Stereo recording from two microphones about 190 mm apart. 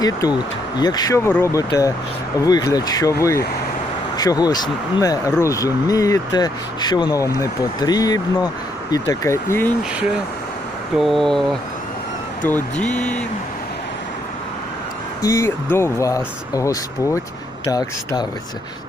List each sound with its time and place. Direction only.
0.0 s speech: 20° left (ahead or behind)
10.9 s speech: centre (ahead or behind)
15.2 s speech: 15° left (ahead or behind)